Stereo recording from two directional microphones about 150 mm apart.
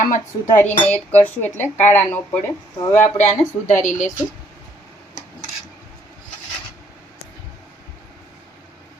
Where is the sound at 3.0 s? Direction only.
50° left (ahead or behind).